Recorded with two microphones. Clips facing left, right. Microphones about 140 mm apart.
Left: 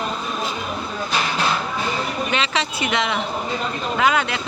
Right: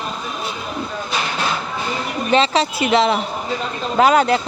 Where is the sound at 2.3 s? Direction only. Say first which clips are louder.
Right 7 dB; 35° right (ahead or behind).